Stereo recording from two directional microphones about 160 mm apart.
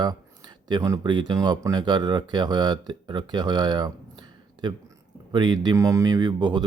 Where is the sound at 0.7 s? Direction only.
25° right (ahead or behind).